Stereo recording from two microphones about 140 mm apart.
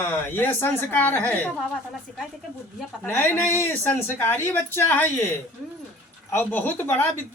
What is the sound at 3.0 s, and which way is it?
Speech, 15° left (ahead or behind).